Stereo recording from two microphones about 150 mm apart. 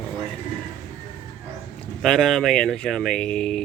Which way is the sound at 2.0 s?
Centre (ahead or behind).